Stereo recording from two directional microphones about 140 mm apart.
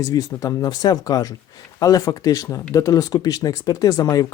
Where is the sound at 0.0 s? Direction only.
25° left (ahead or behind).